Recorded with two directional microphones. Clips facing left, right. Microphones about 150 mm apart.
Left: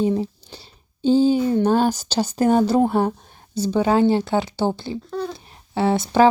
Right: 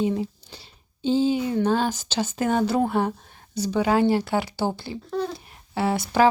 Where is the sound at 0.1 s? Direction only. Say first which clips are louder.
Left 4 dB; 30° left (ahead or behind).